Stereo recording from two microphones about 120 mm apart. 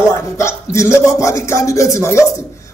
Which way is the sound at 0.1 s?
25° left (ahead or behind).